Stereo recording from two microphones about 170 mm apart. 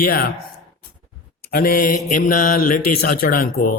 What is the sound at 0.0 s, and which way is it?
Speech, 60° left (ahead or behind).